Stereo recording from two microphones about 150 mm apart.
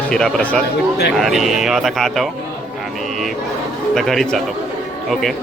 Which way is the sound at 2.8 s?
Centre (ahead or behind).